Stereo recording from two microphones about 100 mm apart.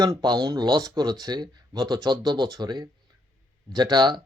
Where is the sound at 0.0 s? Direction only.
45° right (ahead or behind).